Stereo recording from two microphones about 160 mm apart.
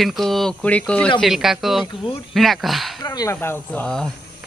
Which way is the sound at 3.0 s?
20° left (ahead or behind).